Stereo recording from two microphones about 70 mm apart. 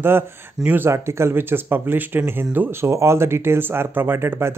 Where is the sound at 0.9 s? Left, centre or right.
Right.